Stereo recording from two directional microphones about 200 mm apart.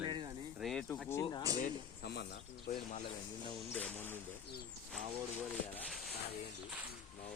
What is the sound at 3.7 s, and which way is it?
Speech, 10° left (ahead or behind).